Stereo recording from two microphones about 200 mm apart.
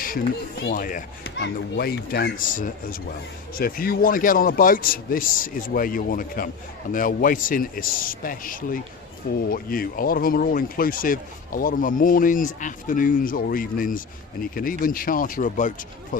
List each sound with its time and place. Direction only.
0.7 s speech: 45° left (ahead or behind)